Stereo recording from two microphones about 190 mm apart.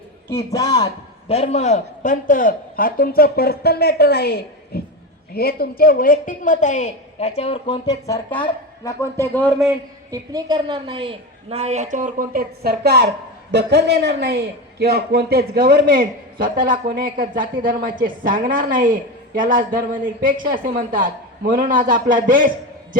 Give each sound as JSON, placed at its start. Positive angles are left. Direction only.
{"t": 0.5, "sound": "a man's voice", "side_deg": 20}
{"t": 1.3, "sound": "a man's voice", "side_deg": 35}
{"t": 8.0, "sound": "speech", "side_deg": 15}
{"t": 10.1, "sound": "a woman's voice", "side_deg": -20}